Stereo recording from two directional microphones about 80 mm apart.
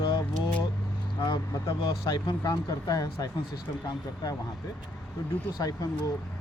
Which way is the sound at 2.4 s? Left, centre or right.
Left.